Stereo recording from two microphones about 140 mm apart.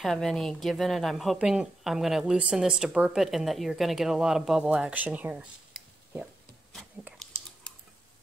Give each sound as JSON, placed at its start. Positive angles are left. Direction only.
{"t": 0.0, "sound": "a woman's voice", "side_deg": 5}